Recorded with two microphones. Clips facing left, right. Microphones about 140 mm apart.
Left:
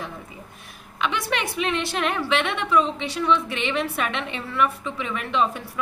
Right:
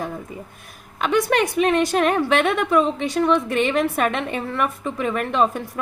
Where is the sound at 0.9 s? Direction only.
45° right (ahead or behind).